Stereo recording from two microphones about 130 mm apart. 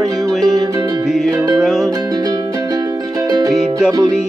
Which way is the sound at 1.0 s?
Centre (ahead or behind).